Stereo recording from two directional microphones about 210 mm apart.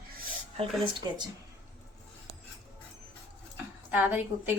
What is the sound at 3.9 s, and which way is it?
Speech, 10° right (ahead or behind).